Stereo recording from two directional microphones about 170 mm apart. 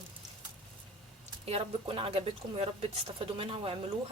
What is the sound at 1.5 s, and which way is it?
Speech, 35° right (ahead or behind).